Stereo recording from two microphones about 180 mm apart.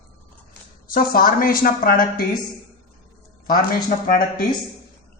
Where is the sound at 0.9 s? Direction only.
50° left (ahead or behind).